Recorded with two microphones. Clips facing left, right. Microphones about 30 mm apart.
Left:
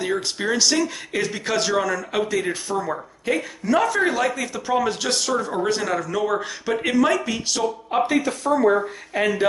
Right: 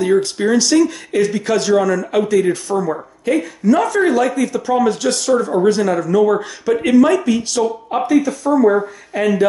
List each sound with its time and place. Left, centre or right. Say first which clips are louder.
0.0 s speech: right 9 dB; centre
8.1 s speech: right 6 dB; left
9.1 s speech: right 5 dB; centre